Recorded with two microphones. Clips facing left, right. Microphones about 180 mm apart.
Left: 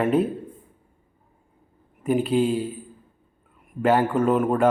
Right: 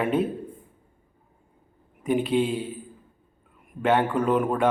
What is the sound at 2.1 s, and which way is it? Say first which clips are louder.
Speech: left 2 dB; 5° left (ahead or behind).